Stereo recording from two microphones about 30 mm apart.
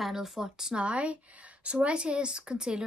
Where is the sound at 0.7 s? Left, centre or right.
Right.